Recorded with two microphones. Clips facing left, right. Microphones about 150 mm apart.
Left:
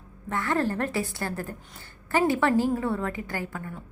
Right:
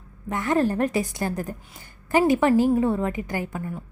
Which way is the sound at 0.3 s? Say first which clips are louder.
Right 4 dB; 20° right (ahead or behind).